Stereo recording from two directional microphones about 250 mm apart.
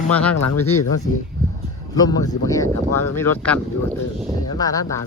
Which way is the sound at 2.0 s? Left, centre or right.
Centre.